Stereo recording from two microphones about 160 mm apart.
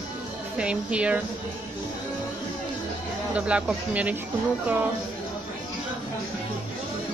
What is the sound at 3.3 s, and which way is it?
Speech, 5° right (ahead or behind).